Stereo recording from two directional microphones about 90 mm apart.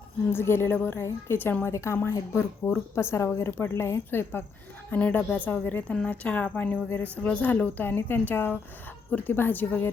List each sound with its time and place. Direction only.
0.3 s a woman's voice: 25° left (ahead or behind)